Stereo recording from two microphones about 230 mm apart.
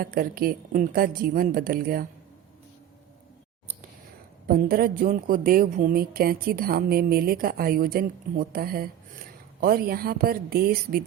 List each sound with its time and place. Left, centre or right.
0.0 s a woman's voice: right
4.4 s a woman's voice: right